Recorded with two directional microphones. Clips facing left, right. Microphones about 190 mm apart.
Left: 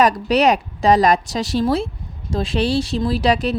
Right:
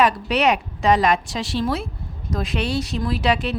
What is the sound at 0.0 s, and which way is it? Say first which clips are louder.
A woman's voice: left 3 dB; 40° left (ahead or behind).